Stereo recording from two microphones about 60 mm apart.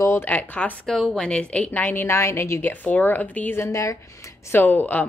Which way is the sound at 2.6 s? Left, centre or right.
Left.